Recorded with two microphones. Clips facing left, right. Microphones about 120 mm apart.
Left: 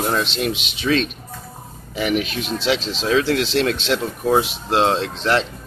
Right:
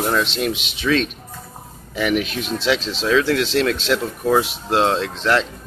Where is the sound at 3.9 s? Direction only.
25° left (ahead or behind).